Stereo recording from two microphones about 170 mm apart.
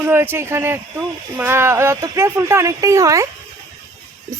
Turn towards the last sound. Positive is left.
turn(degrees=-20)  # may be behind; listen again after turning